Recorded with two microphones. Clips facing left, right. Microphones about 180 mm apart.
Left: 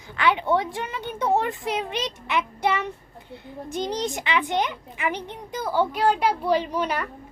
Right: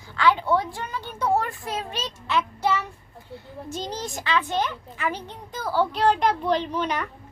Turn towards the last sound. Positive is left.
turn(degrees=5)  # may be behind; listen again after turning